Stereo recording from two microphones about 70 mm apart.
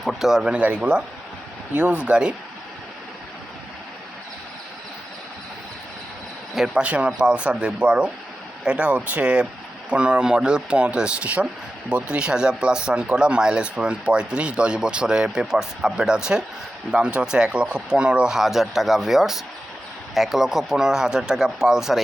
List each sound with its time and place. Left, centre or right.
0.0 s speech: centre
6.5 s a man's voice: centre
6.8 s speech: centre